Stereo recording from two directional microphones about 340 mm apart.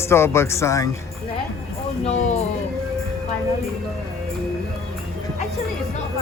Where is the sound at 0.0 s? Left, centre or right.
Centre.